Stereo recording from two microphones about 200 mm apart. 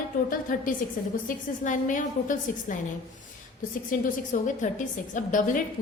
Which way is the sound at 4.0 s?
40° left (ahead or behind).